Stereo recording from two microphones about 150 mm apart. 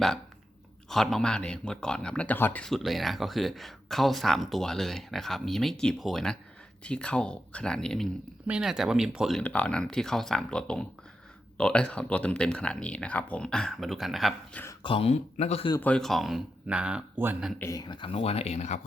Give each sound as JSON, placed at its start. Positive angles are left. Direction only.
{"t": 0.9, "sound": "speech", "side_deg": 0}
{"t": 9.4, "sound": "speech", "side_deg": 10}
{"t": 14.5, "sound": "speech", "side_deg": 15}
{"t": 14.8, "sound": "speech", "side_deg": 40}
{"t": 15.8, "sound": "speech", "side_deg": 5}
{"t": 17.6, "sound": "speech", "side_deg": 20}